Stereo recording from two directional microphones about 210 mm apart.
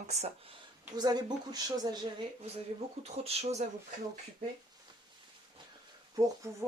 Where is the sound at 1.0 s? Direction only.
20° right (ahead or behind).